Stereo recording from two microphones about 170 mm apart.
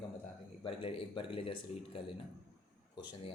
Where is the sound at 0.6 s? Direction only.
30° left (ahead or behind).